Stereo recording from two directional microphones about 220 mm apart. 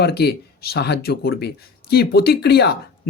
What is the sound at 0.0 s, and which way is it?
Speech, 45° left (ahead or behind).